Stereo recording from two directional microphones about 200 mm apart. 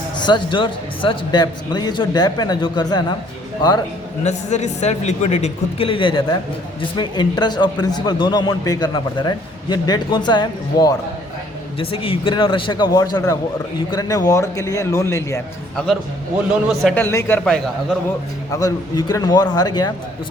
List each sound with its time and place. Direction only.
0.2 s a man's voice: 20° left (ahead or behind)
4.2 s a man's voice: 35° left (ahead or behind); by 15.4 s 15° left (ahead or behind)
16.5 s a man's voice: 5° right (ahead or behind)
16.9 s a man's voice: 10° left (ahead or behind)
18.5 s a man's voice: 20° left (ahead or behind)